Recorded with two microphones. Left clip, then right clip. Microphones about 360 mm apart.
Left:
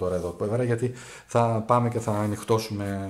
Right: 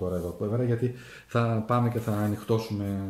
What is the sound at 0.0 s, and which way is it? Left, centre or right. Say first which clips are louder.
Speech: left 4 dB; left.